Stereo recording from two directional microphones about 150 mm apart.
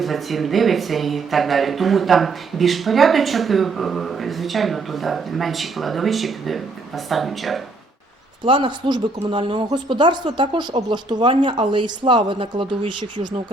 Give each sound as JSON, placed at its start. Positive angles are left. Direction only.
{"t": 0.0, "sound": "speech", "side_deg": 0}
{"t": 8.4, "sound": "speech", "side_deg": -35}